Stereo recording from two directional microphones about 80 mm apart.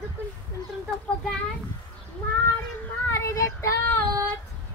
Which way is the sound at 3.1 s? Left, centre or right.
Left.